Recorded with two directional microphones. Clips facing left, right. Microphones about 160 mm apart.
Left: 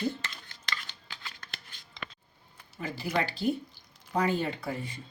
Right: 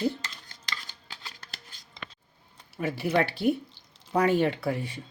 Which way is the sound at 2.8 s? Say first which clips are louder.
Right 5 dB; 65° right (ahead or behind).